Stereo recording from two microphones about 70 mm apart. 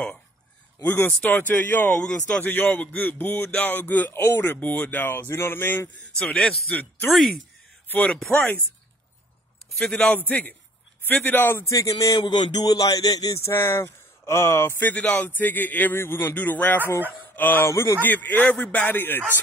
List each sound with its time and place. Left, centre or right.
0.8 s speech: left
6.1 s speech: centre
7.1 s speech: centre
7.9 s speech: left
9.8 s a man's voice: centre
10.1 s speech: left
11.4 s a man's voice: left
11.7 s speech: left
12.2 s speech: left
13.5 s speech: left
15.0 s speech: left
17.6 s a man's voice: left
18.0 s speech: left